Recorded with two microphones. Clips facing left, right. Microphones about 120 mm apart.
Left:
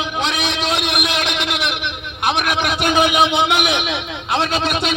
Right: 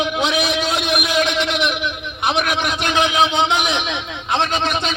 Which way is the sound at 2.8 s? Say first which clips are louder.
Left 2 dB; 10° left (ahead or behind).